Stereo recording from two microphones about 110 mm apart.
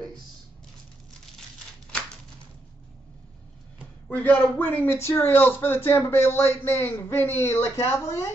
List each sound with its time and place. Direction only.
4.1 s a man's voice: 15° left (ahead or behind)